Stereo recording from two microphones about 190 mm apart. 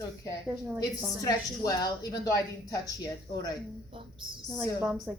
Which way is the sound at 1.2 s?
20° left (ahead or behind).